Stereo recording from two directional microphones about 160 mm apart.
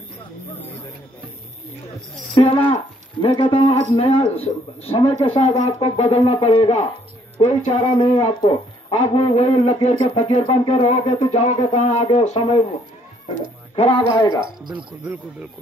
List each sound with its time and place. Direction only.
2.3 s speech: 35° left (ahead or behind)
8.0 s speech: 30° left (ahead or behind)
8.9 s speech: 40° left (ahead or behind)
10.4 s speech: 30° left (ahead or behind)
10.8 s speech: 45° left (ahead or behind)
13.7 s speech: 30° left (ahead or behind)
14.7 s speech: 30° right (ahead or behind)